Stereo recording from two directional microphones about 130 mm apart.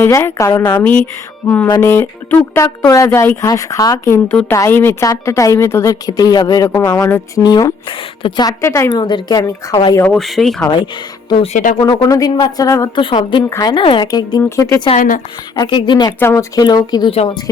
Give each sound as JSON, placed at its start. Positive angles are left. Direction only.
{"t": 0.0, "sound": "a woman's voice", "side_deg": 20}
{"t": 8.4, "sound": "a woman's voice", "side_deg": 20}
{"t": 8.9, "sound": "speech", "side_deg": 35}
{"t": 10.2, "sound": "speech", "side_deg": 0}
{"t": 11.5, "sound": "speech", "side_deg": 75}
{"t": 11.8, "sound": "a woman's voice", "side_deg": 30}
{"t": 13.0, "sound": "speech", "side_deg": 40}
{"t": 13.5, "sound": "speech", "side_deg": 30}
{"t": 14.9, "sound": "a woman's voice", "side_deg": 90}
{"t": 15.5, "sound": "speech", "side_deg": 35}
{"t": 16.2, "sound": "speech", "side_deg": 25}
{"t": 17.1, "sound": "a woman's voice", "side_deg": 45}